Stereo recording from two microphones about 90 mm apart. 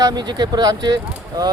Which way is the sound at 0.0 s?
50° right (ahead or behind).